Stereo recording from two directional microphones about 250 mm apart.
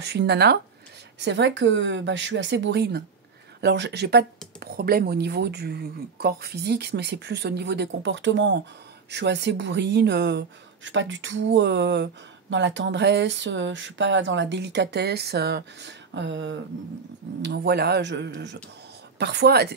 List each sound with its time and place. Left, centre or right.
0.0 s speech: right